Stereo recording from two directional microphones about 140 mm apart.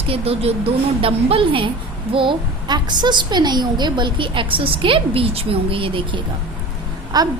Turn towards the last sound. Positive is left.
turn(degrees=-30)  # may be behind; listen again after turning